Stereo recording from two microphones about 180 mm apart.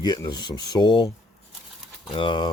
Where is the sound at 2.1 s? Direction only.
25° left (ahead or behind).